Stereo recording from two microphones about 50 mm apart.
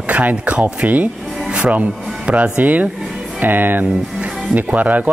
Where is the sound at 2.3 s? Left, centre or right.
Right.